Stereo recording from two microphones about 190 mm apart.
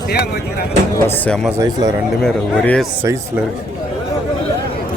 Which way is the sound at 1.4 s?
15° right (ahead or behind).